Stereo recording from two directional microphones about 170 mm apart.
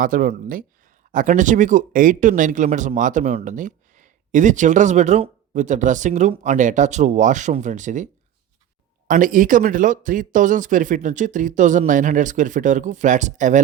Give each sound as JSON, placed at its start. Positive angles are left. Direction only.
{"t": 0.0, "sound": "speech", "side_deg": -55}